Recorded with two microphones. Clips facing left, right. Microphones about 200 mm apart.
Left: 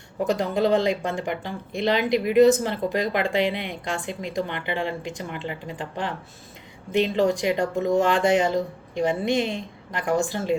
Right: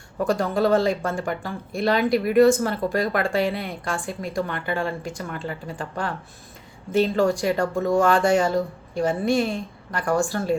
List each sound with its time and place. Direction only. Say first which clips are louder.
0.3 s speech: right 1 dB; 20° left (ahead or behind)